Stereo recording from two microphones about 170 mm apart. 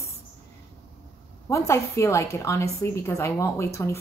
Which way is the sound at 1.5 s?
15° left (ahead or behind).